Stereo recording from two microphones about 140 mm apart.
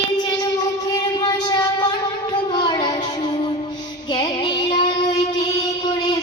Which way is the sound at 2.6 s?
30° left (ahead or behind).